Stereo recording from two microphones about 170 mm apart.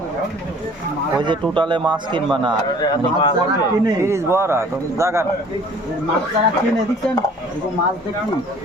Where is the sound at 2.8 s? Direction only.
25° left (ahead or behind).